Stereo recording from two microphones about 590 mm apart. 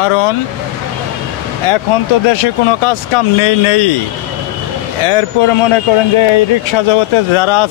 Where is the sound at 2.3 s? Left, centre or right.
Left.